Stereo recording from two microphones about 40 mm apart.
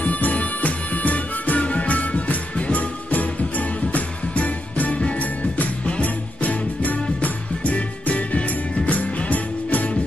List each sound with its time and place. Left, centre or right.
0.0 s music: left